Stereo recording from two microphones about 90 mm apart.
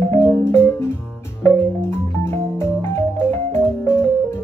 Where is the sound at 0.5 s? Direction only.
30° left (ahead or behind).